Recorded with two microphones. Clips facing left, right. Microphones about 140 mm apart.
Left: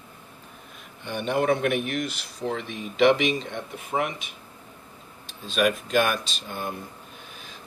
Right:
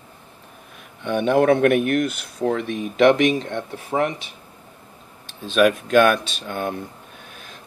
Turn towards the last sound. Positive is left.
turn(degrees=-60)  # may be behind; listen again after turning